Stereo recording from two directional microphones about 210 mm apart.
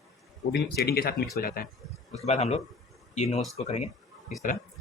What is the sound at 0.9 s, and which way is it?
Speech, 45° left (ahead or behind).